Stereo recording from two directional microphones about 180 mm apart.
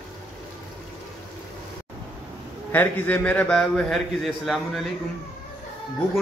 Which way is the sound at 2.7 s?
10° left (ahead or behind).